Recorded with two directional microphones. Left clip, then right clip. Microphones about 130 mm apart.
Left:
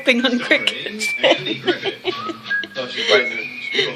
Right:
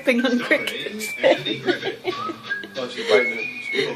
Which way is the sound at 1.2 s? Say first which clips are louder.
Left 1 dB; 25° left (ahead or behind).